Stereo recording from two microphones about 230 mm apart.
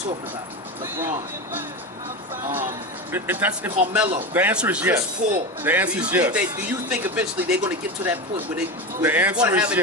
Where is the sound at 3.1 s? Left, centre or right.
Centre.